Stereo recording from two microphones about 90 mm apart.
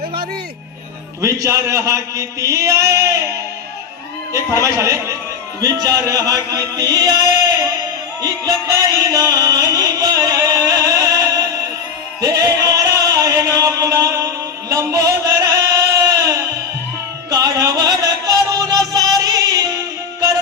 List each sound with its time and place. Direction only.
1.2 s a man's voice: 35° right (ahead or behind)
5.5 s speech: 45° right (ahead or behind)
8.2 s music: 45° right (ahead or behind)